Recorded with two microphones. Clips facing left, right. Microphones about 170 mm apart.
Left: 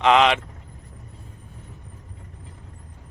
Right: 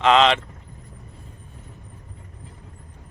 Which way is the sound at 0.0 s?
15° left (ahead or behind).